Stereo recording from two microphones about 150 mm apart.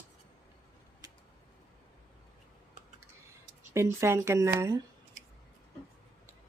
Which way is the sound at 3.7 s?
20° right (ahead or behind).